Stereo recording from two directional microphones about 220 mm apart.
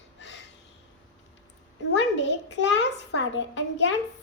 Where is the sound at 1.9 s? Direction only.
55° left (ahead or behind).